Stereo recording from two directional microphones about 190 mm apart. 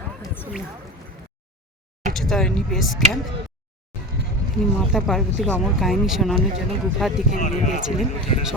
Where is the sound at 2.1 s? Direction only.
Centre (ahead or behind).